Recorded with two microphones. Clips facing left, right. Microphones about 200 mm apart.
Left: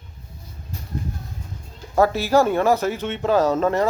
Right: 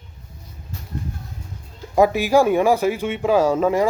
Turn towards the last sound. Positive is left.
turn(degrees=-10)  # may be behind; listen again after turning